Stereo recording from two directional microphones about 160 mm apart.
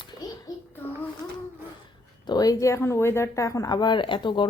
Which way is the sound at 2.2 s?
25° left (ahead or behind).